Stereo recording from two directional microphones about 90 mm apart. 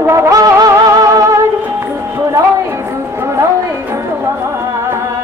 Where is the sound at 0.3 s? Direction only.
40° right (ahead or behind).